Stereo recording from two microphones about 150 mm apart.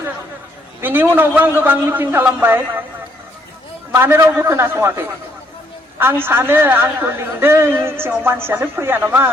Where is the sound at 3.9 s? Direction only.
15° right (ahead or behind).